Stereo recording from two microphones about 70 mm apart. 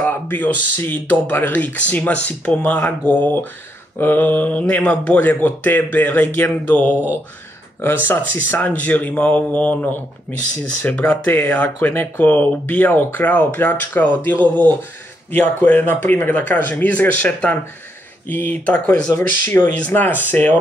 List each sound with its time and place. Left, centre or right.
0.0 s speech: left